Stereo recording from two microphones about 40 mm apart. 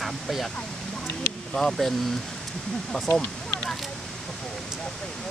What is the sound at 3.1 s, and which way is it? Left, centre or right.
Speech, left.